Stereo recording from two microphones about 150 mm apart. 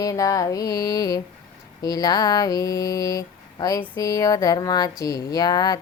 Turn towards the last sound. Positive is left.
turn(degrees=25)  # may be behind; listen again after turning